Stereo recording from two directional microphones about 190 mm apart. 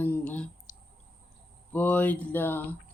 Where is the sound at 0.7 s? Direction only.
45° left (ahead or behind).